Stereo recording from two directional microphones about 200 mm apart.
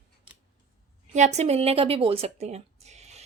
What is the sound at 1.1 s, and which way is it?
A woman's voice, 35° right (ahead or behind).